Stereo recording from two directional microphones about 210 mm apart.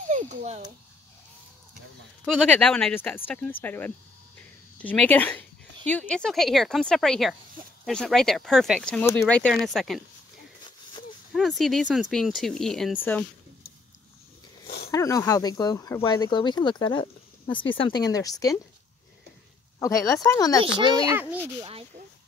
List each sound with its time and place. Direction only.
0.1 s babbling: 35° right (ahead or behind)
2.2 s speech: 5° left (ahead or behind)
10.6 s a sound: 20° left (ahead or behind)
11.3 s speech: centre (ahead or behind)
14.9 s speech: 15° left (ahead or behind)
19.8 s speech: 15° left (ahead or behind)
20.6 s a child's voice: 25° right (ahead or behind)
21.5 s speech: 25° right (ahead or behind)